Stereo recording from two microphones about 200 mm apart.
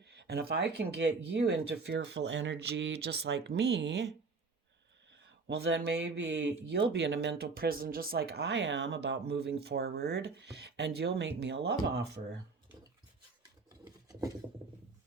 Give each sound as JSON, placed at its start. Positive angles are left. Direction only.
{"t": 0.0, "sound": "speech", "side_deg": -55}
{"t": 5.1, "sound": "speech", "side_deg": -60}
{"t": 14.1, "sound": "filing", "side_deg": -20}